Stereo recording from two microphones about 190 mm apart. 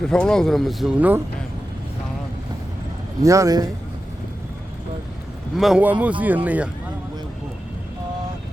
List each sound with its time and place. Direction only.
0.1 s speech: 5° left (ahead or behind)
3.2 s speech: 15° right (ahead or behind)
5.5 s speech: 5° right (ahead or behind)